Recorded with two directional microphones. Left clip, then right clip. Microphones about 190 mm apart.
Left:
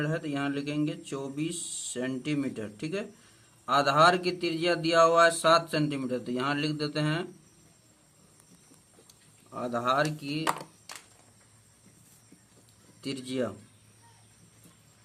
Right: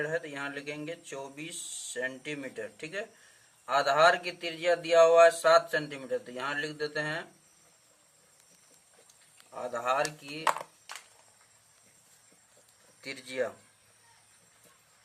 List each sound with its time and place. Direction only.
0.0 s a man's voice: 15° left (ahead or behind)
9.5 s a man's voice: 15° left (ahead or behind)
13.1 s a man's voice: 15° left (ahead or behind)